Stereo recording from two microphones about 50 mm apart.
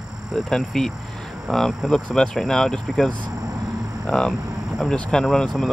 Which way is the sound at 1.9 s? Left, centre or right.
Centre.